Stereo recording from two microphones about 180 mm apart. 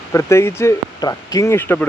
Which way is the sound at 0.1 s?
15° left (ahead or behind).